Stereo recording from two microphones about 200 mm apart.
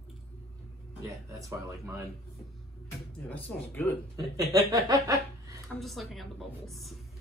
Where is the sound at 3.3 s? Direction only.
10° left (ahead or behind).